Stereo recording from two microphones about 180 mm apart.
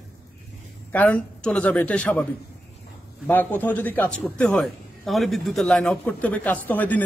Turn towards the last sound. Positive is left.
turn(degrees=10)  # may be behind; listen again after turning